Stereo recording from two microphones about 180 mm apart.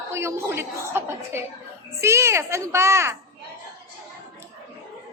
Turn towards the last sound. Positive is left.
turn(degrees=-15)  # may be behind; listen again after turning